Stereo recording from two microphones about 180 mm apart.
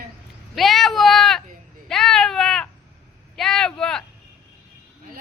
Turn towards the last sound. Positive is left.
turn(degrees=5)  # may be behind; listen again after turning